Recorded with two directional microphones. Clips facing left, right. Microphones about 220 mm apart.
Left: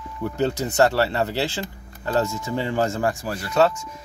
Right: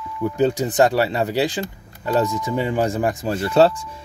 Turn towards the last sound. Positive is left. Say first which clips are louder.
# right 4 dB
turn(degrees=-30)  # may be behind; listen again after turning